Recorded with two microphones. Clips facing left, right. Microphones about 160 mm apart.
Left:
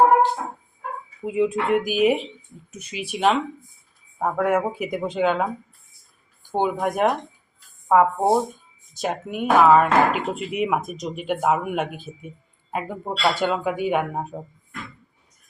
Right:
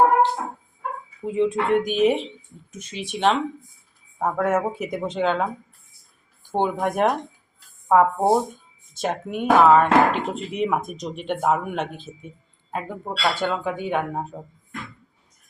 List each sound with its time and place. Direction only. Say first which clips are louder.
1.2 s speech: even; 5° left (ahead or behind)